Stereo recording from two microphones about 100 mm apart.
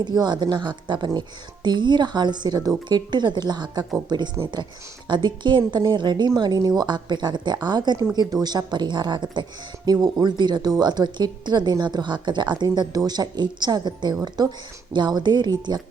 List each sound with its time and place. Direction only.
0.0 s speech: 45° right (ahead or behind)
14.2 s a woman's voice: 30° right (ahead or behind)
14.9 s speech: 50° right (ahead or behind)